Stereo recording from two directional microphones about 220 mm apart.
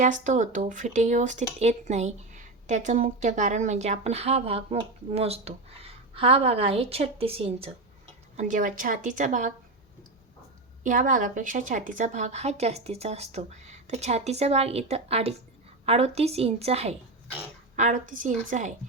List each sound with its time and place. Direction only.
0.0 s speech: 35° right (ahead or behind)
10.8 s speech: 35° right (ahead or behind)